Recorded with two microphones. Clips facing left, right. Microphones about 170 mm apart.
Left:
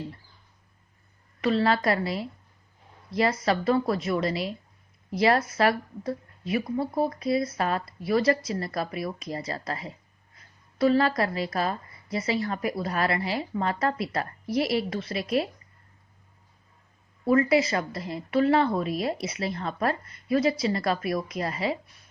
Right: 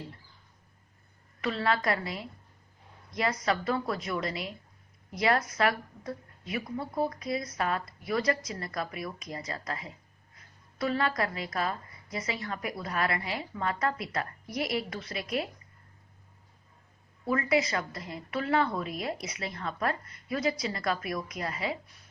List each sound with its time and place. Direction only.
1.4 s a woman's voice: 25° left (ahead or behind)
17.2 s a woman's voice: 30° left (ahead or behind)